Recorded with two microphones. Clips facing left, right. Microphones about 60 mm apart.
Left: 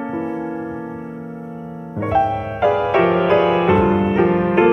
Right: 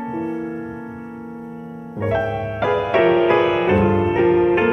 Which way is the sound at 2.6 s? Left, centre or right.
Centre.